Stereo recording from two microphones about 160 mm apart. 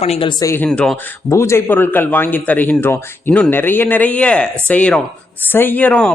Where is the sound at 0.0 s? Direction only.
35° left (ahead or behind); by 0.7 s 15° left (ahead or behind).